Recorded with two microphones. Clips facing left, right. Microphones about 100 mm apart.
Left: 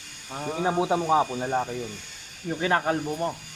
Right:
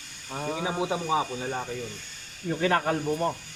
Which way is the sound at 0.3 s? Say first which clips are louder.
Even; centre (ahead or behind).